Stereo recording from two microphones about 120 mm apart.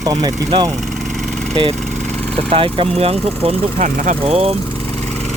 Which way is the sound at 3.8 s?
70° right (ahead or behind).